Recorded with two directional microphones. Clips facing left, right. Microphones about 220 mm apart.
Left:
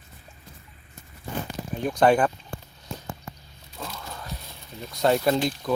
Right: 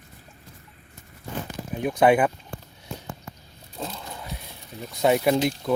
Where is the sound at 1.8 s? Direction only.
5° right (ahead or behind).